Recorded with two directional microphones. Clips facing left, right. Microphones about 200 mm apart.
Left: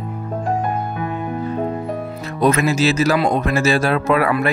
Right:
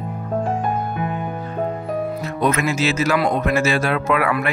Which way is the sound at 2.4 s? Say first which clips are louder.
Left 4 dB; 35° left (ahead or behind).